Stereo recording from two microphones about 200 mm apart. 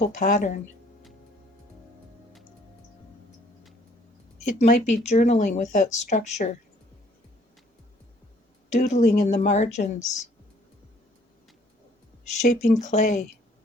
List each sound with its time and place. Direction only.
0.0 s speech: 40° left (ahead or behind)
4.4 s speech: 35° left (ahead or behind)
8.7 s speech: 35° left (ahead or behind)
12.2 s speech: 35° left (ahead or behind)